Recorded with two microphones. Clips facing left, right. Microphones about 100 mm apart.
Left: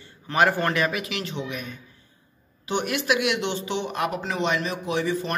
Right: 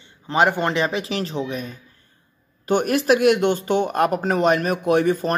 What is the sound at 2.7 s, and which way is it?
Speech, 45° right (ahead or behind).